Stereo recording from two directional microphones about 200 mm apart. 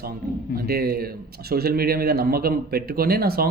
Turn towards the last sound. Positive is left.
turn(degrees=-50)  # may be behind; listen again after turning